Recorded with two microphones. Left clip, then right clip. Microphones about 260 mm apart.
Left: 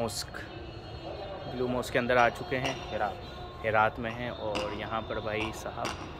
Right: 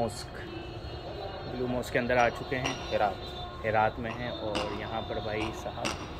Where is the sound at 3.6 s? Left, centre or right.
Centre.